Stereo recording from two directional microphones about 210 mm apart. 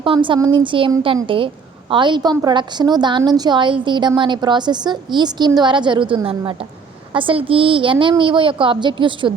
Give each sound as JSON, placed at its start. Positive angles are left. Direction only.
{"t": 0.0, "sound": "a woman's voice", "side_deg": -25}